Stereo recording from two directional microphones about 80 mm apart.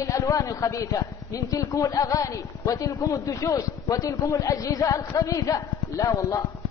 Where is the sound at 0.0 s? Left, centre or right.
Left.